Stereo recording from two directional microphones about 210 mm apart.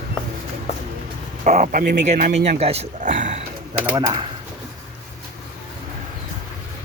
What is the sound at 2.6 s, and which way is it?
Speech, 30° right (ahead or behind).